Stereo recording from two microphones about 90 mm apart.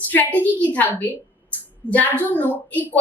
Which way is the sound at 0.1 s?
20° left (ahead or behind).